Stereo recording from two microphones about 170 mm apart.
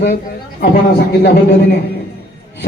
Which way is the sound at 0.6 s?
75° left (ahead or behind).